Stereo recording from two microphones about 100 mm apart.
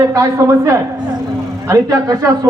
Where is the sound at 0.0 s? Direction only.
35° right (ahead or behind).